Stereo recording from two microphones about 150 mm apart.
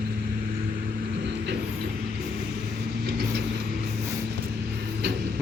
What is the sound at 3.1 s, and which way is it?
Vehicle, 90° right.